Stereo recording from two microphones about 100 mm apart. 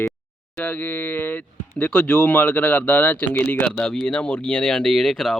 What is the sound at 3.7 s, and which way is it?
Speech, 5° left (ahead or behind).